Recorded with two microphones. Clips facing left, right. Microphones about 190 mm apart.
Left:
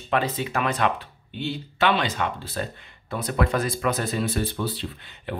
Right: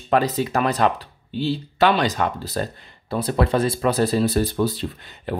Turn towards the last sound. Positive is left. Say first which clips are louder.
# right 5 dB
turn(degrees=-40)  # may be behind; listen again after turning